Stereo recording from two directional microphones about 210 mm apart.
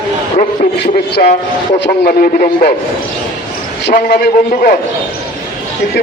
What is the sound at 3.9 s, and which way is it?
Speech, 40° left (ahead or behind).